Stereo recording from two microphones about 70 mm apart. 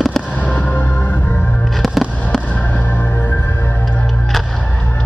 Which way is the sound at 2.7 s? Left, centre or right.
Left.